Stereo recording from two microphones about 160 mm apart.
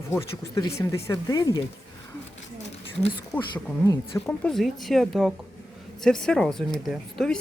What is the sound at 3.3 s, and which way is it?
Speech, 10° left (ahead or behind).